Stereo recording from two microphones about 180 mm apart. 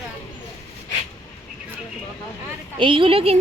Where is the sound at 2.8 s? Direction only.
30° right (ahead or behind).